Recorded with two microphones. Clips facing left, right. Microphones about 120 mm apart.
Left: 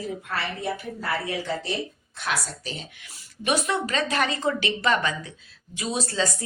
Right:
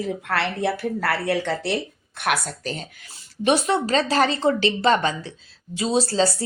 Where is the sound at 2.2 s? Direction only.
65° right (ahead or behind).